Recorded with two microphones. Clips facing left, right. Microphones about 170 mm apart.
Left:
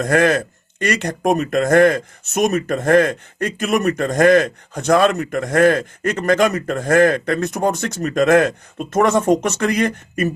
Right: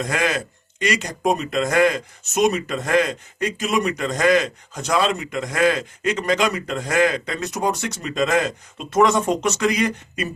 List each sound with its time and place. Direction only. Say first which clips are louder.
0.0 s speech: left 7 dB; 55° left (ahead or behind)